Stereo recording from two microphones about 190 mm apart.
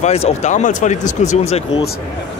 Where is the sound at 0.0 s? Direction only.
35° left (ahead or behind).